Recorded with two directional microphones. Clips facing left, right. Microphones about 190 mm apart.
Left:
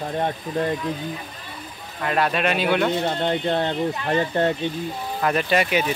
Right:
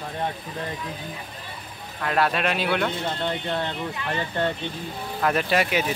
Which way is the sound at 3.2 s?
40° left (ahead or behind).